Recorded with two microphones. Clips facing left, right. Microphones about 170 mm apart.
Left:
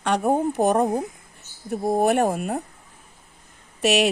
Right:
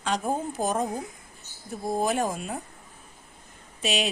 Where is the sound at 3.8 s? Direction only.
70° left (ahead or behind).